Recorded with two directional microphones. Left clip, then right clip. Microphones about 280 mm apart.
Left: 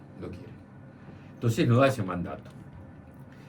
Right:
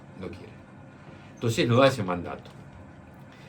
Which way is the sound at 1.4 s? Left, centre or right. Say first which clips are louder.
Right 3 dB; right.